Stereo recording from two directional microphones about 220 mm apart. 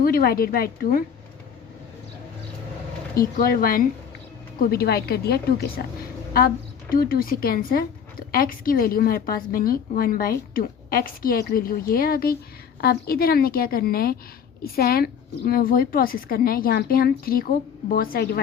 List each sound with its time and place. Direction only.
0.0 s a woman's voice: 40° left (ahead or behind)
3.2 s a woman's voice: 40° left (ahead or behind)
6.9 s a woman's voice: 40° left (ahead or behind)